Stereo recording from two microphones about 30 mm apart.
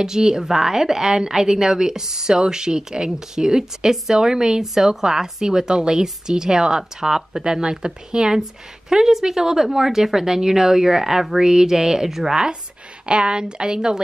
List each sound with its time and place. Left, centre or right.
0.0 s a woman's voice: right
8.4 s a woman's voice: centre
13.0 s a woman's voice: right